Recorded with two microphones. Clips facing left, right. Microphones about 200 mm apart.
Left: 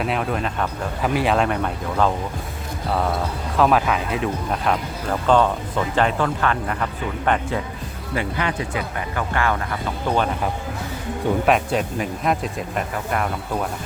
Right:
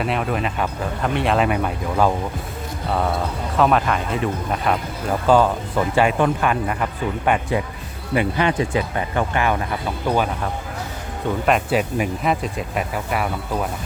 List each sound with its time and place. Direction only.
0.0 s speech: centre (ahead or behind)
3.6 s speech: centre (ahead or behind)
8.1 s speech: 20° right (ahead or behind)
11.4 s speech: 5° right (ahead or behind)